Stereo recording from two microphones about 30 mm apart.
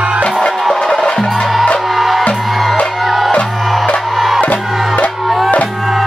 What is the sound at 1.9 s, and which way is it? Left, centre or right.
Music, centre.